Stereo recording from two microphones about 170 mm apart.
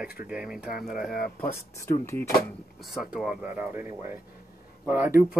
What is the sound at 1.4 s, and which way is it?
Speech, 15° left (ahead or behind).